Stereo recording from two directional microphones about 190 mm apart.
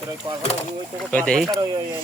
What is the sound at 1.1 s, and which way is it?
Speech, 5° left (ahead or behind).